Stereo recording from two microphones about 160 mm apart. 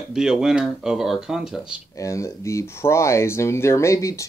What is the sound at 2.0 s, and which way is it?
Speech, 20° left (ahead or behind).